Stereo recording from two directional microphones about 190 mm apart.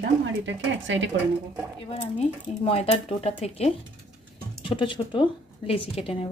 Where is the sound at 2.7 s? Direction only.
35° left (ahead or behind).